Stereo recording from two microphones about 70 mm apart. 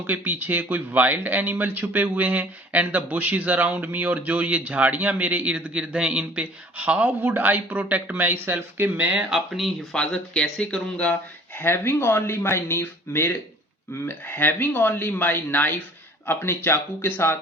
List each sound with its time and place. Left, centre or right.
0.1 s speech: right
9.3 s speech: centre
11.5 s speech: left